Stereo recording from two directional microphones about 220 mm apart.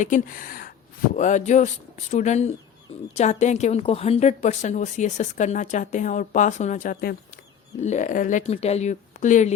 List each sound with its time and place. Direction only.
0.0 s a woman's voice: 35° left (ahead or behind)
7.8 s a woman's voice: 30° left (ahead or behind)